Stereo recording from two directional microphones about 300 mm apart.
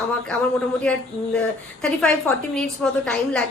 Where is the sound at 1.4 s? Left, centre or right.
Centre.